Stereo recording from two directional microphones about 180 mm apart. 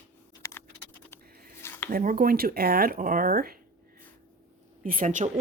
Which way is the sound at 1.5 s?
15° left (ahead or behind).